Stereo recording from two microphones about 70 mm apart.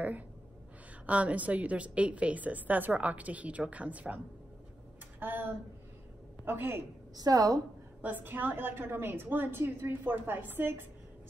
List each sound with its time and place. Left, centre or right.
1.0 s a woman's voice: centre
5.2 s a woman's voice: right
7.2 s a woman's voice: right
8.0 s a woman's voice: right